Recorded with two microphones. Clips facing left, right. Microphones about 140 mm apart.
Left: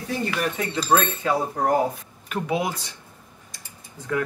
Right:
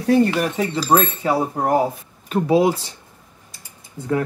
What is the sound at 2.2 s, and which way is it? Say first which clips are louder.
Speech: right 9 dB; 35° right (ahead or behind).